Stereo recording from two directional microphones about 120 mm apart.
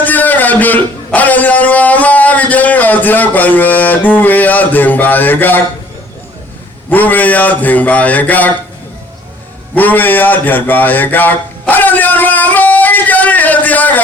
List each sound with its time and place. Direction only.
0.0 s a man's voice: 15° left (ahead or behind)
6.9 s speech: 15° left (ahead or behind)
9.7 s a sound: 15° left (ahead or behind)